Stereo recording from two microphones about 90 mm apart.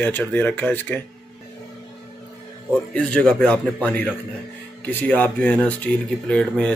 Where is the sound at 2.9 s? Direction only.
10° left (ahead or behind).